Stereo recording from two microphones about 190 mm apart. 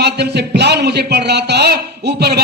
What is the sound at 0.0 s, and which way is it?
A man's voice, 60° right (ahead or behind).